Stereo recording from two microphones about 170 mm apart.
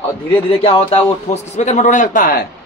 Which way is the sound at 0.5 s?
35° left (ahead or behind).